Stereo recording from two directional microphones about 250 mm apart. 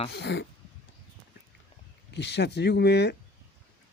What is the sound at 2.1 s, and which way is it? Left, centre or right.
Speech, left.